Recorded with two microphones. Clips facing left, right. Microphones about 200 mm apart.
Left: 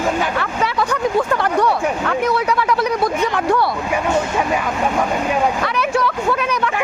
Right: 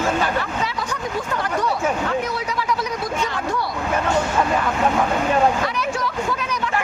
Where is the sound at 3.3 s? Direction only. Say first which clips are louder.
Left 7 dB; 65° left (ahead or behind).